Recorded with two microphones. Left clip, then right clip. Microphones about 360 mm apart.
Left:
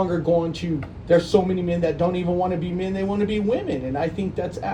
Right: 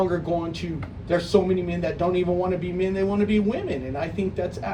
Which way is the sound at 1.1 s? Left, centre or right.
Left.